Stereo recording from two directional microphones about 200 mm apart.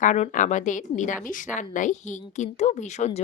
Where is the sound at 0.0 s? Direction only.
40° left (ahead or behind).